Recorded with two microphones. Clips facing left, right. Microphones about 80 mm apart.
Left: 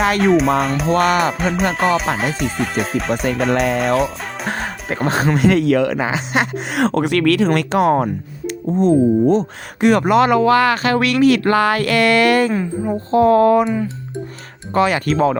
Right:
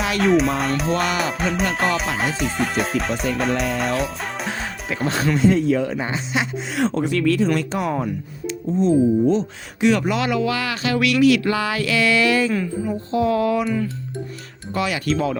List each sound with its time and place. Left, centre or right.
0.2 s music: centre
0.9 s speech: left
1.3 s music: centre
3.5 s speech: left
3.8 s speech: centre
4.4 s music: left
5.0 s speech: left
5.3 s speech: left
6.3 s speech: left
12.8 s speech: left
13.7 s speech: left
14.7 s speech: left